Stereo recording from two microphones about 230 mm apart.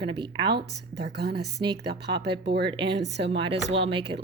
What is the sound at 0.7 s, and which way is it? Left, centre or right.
A woman's voice, right.